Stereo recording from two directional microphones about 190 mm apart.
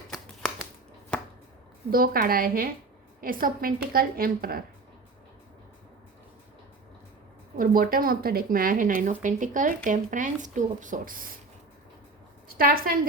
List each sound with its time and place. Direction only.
1.9 s speech: 50° right (ahead or behind)
7.6 s speech: 50° right (ahead or behind)
12.5 s a woman's voice: 50° right (ahead or behind)